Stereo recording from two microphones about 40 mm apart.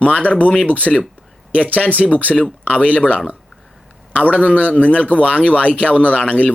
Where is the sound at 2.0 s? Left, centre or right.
Centre.